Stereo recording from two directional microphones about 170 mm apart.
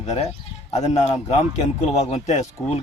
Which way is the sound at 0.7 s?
40° left (ahead or behind).